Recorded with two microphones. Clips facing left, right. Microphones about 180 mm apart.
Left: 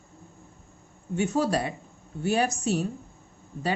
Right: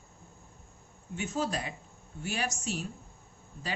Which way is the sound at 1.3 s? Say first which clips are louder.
Left 6 dB; 65° left (ahead or behind).